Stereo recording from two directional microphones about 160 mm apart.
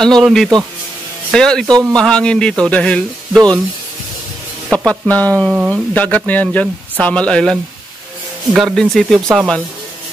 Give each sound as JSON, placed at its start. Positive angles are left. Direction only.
{"t": 0.0, "sound": "a man's voice", "side_deg": 5}
{"t": 1.7, "sound": "a man's voice", "side_deg": -25}
{"t": 2.0, "sound": "a man's voice", "side_deg": 5}
{"t": 4.7, "sound": "speech", "side_deg": 10}
{"t": 8.5, "sound": "a man's voice", "side_deg": 0}